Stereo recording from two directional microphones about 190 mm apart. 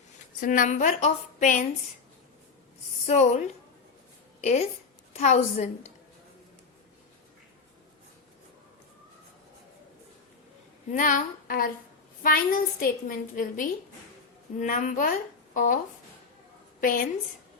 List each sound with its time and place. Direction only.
0.3 s a woman's voice: 45° left (ahead or behind)
3.1 s a woman's voice: 35° left (ahead or behind)
10.9 s a woman's voice: 45° left (ahead or behind)
16.8 s a woman's voice: 45° left (ahead or behind)